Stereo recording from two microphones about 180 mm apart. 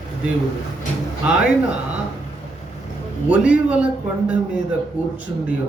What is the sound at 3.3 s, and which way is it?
Speech, 5° right (ahead or behind).